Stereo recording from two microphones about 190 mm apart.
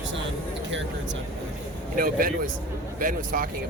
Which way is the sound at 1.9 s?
50° right (ahead or behind).